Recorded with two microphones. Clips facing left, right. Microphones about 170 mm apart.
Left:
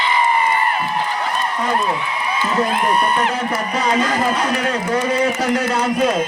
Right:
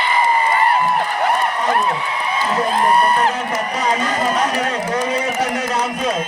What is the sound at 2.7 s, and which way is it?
Music, 35° right (ahead or behind).